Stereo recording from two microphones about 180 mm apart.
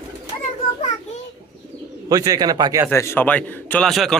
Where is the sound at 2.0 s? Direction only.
20° right (ahead or behind).